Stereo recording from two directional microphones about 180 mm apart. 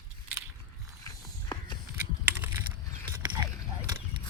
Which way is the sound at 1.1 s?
25° left (ahead or behind).